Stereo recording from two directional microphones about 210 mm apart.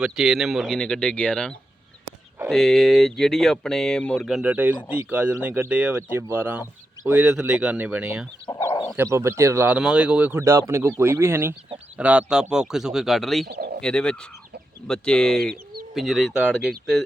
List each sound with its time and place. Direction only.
0.0 s speech: centre (ahead or behind)
8.4 s bow-wow: 20° left (ahead or behind)
9.0 s speech: 15° right (ahead or behind)
13.5 s speech: 50° right (ahead or behind)
13.8 s speech: 5° left (ahead or behind)